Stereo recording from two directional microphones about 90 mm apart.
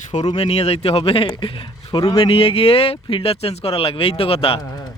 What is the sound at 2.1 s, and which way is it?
Speech, 90° left.